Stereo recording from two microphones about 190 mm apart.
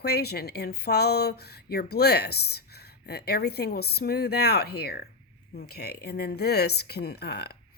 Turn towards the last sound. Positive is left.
turn(degrees=60)  # may be behind; listen again after turning